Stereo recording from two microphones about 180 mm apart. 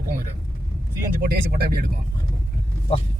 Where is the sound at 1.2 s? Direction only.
60° right (ahead or behind).